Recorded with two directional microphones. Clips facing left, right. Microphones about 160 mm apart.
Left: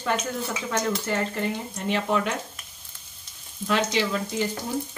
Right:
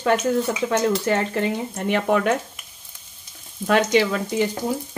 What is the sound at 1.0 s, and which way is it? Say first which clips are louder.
Speech: right 6 dB; 80° right.